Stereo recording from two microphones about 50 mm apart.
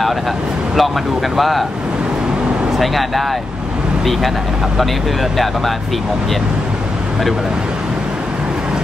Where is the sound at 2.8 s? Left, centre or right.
Centre.